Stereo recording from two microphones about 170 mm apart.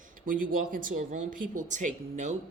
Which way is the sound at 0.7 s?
50° right (ahead or behind).